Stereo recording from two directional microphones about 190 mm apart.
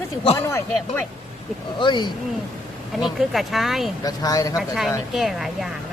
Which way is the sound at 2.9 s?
Centre (ahead or behind).